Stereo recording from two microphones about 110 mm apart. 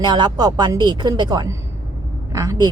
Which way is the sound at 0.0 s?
40° right (ahead or behind).